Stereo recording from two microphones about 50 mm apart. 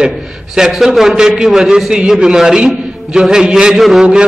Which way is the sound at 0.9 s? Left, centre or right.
Centre.